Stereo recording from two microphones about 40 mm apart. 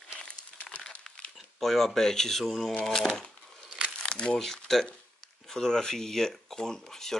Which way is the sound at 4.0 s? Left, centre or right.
Left.